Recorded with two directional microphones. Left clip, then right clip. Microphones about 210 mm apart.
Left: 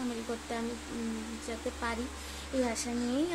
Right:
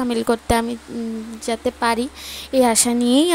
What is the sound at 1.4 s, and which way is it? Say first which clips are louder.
A woman's voice: right 17 dB; 40° right (ahead or behind).